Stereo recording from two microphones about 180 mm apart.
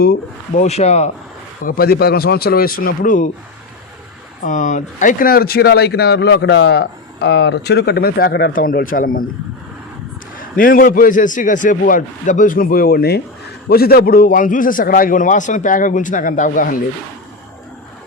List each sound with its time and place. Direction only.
0.0 s speech: 55° left (ahead or behind)
0.6 s speech: 35° left (ahead or behind)
1.6 s speech: 55° left (ahead or behind)
4.4 s speech: 45° left (ahead or behind)
10.6 s a man's voice: 50° left (ahead or behind)